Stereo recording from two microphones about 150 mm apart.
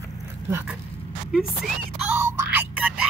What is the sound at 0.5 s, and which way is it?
Speech, 15° right (ahead or behind).